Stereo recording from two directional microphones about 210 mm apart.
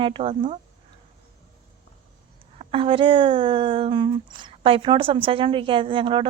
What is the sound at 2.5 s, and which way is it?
Speech, 25° right (ahead or behind).